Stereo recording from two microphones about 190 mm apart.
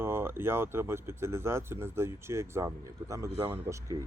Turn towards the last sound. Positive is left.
turn(degrees=-15)  # may be behind; listen again after turning